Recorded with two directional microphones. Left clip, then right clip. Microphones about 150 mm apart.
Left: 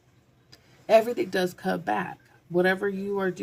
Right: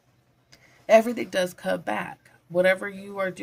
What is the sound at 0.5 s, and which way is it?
Speech, 25° right (ahead or behind).